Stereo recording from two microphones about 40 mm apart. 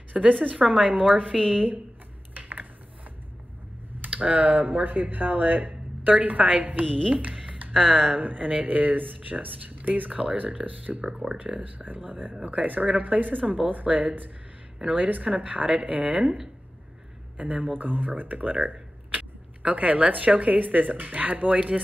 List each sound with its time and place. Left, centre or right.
0.1 s a woman's voice: right
4.0 s speech: right
8.1 s speech: right
12.0 s speech: right
12.4 s speech: right
17.4 s speech: right